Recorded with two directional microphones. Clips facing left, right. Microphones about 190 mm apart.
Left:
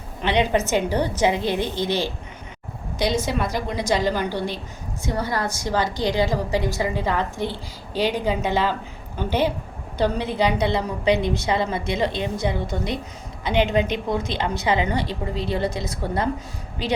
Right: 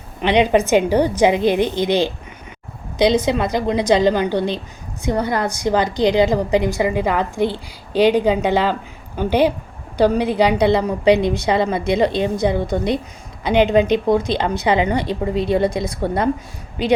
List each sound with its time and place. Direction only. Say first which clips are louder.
0.2 s a woman's voice: right 6 dB; 15° right (ahead or behind)